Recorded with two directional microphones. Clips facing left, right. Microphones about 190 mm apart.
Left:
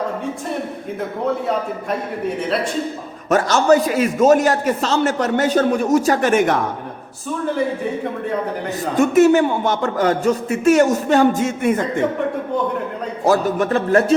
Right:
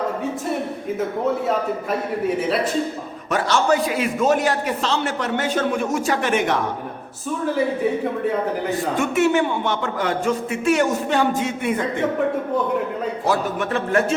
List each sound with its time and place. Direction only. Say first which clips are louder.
3.2 s a man's voice: left 5 dB; 45° left (ahead or behind)
9.0 s a man's voice: left 7 dB; 40° left (ahead or behind)
13.2 s a man's voice: left 7 dB; 40° left (ahead or behind)